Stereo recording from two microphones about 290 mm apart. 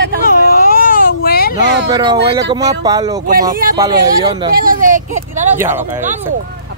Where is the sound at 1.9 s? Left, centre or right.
Centre.